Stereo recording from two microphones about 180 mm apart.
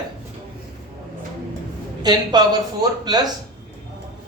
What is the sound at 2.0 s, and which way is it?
Speech, 25° right (ahead or behind).